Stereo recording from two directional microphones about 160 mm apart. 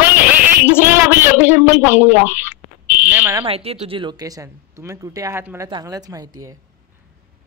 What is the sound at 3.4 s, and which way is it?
Speech, 40° right (ahead or behind).